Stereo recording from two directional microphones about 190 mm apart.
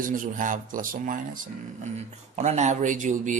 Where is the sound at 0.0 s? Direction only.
45° right (ahead or behind).